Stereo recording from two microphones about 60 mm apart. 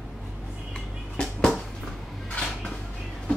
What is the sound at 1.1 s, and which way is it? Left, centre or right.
Music, centre.